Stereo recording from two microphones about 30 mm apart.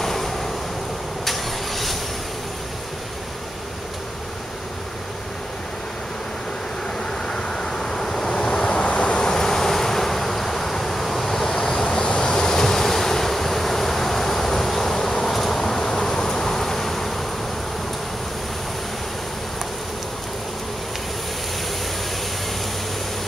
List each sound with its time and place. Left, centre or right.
0.0 s vehicle: centre
7.2 s vehicle: left
8.7 s vehicle: left
9.2 s vehicle: centre